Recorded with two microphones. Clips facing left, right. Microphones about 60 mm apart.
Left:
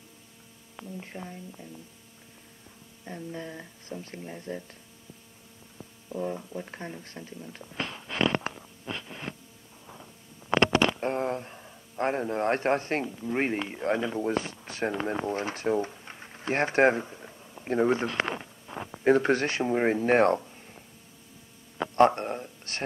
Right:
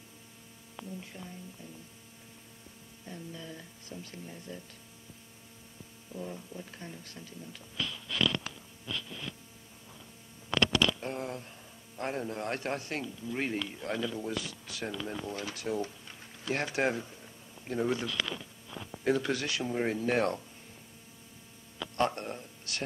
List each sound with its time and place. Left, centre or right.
0.9 s speech: left
3.1 s speech: left
5.8 s speech: left
10.5 s speech: left
21.7 s a sound: left